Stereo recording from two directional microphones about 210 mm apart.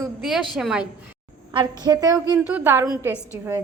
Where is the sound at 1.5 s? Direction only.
20° right (ahead or behind).